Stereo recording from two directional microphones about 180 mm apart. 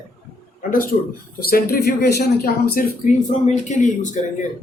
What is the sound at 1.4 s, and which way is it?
Speech, 55° left (ahead or behind).